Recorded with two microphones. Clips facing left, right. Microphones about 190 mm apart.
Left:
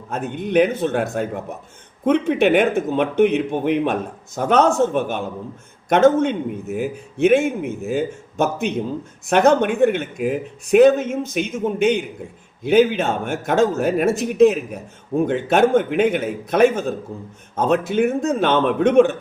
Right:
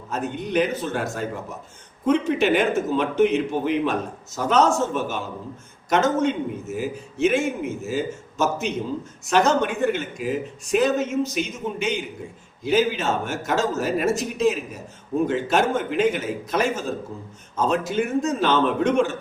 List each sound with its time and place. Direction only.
0.1 s speech: 55° left (ahead or behind)